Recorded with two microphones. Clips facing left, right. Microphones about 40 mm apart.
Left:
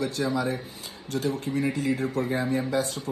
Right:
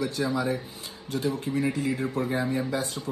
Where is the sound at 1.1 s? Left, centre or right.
Right.